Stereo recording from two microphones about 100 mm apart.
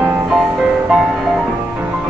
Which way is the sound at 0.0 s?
10° right (ahead or behind).